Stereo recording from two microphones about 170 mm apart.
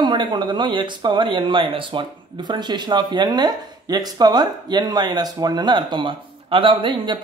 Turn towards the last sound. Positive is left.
turn(degrees=-30)  # may be behind; listen again after turning